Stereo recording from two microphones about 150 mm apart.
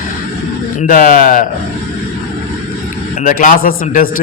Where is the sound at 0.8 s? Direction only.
65° left (ahead or behind).